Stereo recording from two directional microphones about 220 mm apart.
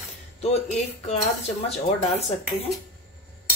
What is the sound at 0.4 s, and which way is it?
Speech, 30° left (ahead or behind).